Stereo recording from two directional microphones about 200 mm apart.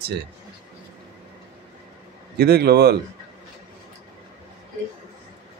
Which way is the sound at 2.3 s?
55° right (ahead or behind).